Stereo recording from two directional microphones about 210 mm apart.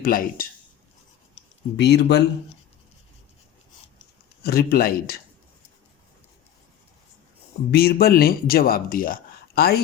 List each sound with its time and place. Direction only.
0.0 s speech: 40° left (ahead or behind)
1.7 s speech: 55° left (ahead or behind)
4.4 s speech: 45° left (ahead or behind)
7.7 s speech: 50° left (ahead or behind)